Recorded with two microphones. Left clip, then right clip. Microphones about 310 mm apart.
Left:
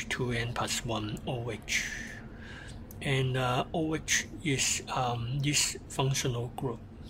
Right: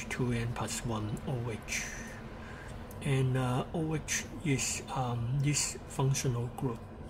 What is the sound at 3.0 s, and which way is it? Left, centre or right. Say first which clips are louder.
Speech: left 4 dB; left.